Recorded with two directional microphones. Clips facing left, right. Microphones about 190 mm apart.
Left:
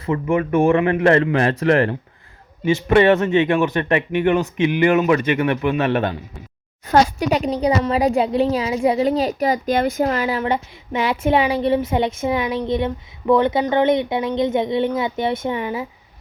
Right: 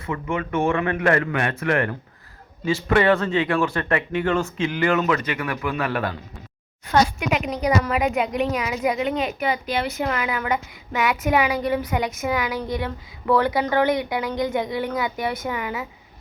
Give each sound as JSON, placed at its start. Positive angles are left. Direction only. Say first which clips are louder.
{"t": 0.0, "sound": "speech", "louder": "left 7 dB", "side_deg": 30}
{"t": 6.9, "sound": "a woman's voice", "louder": "left 4 dB", "side_deg": 35}
{"t": 10.1, "sound": "speech", "louder": "left 4 dB", "side_deg": 30}